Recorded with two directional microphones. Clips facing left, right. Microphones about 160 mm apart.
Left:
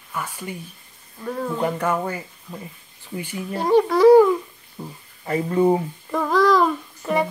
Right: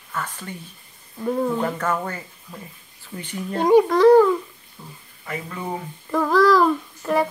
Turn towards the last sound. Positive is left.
turn(degrees=0)  # may be behind; listen again after turning